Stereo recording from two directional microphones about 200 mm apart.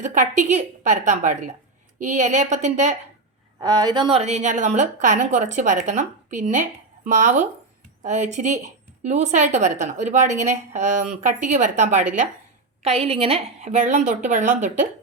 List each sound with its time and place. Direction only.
0.0 s a woman's voice: 40° right (ahead or behind)
3.6 s a woman's voice: 20° right (ahead or behind); by 14.8 s 40° right (ahead or behind)